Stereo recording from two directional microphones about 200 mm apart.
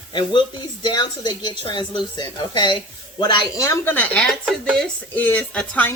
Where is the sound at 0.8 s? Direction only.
20° left (ahead or behind).